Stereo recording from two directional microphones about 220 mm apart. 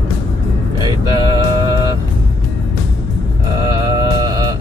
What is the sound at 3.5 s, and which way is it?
Mantra, 20° right (ahead or behind).